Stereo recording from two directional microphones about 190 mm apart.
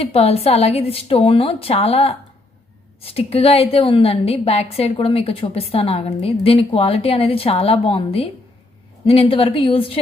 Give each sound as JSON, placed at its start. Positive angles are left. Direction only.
{"t": 0.0, "sound": "a woman's voice", "side_deg": 30}